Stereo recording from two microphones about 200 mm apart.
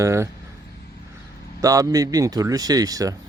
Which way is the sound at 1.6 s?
15° right (ahead or behind).